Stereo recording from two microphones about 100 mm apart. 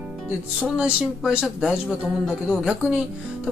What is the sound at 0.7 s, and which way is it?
Speech, 10° right (ahead or behind).